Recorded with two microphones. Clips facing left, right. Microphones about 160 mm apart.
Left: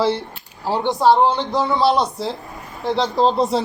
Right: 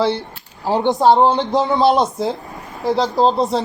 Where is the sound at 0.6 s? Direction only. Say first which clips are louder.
Right 2 dB; 20° right (ahead or behind).